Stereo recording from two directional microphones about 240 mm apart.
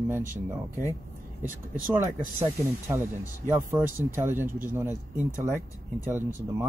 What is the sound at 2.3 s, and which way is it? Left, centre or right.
Speech, centre.